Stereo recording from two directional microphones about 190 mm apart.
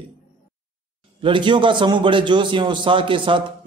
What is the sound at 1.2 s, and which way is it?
A man's voice, 25° right (ahead or behind).